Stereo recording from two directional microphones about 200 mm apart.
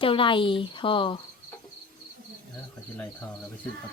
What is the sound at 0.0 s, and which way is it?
Speech, 25° left (ahead or behind).